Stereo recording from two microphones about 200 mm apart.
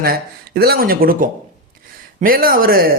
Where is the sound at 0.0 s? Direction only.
50° right (ahead or behind).